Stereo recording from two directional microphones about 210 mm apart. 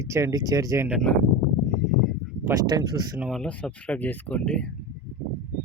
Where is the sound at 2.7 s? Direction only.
20° right (ahead or behind).